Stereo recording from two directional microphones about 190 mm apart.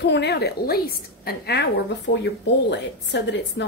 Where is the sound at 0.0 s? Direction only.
60° left (ahead or behind).